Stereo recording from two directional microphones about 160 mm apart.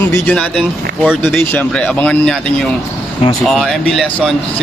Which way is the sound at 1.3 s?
10° left (ahead or behind).